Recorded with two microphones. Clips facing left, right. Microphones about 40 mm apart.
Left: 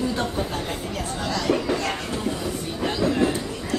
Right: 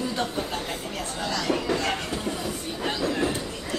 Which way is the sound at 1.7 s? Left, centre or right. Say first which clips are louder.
Left 1 dB; centre.